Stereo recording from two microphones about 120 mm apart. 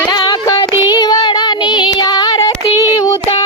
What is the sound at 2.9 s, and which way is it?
Child singing, 30° left (ahead or behind).